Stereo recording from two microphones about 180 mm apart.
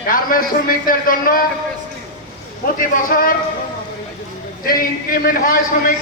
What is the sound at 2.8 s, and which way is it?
Speech, 50° left (ahead or behind).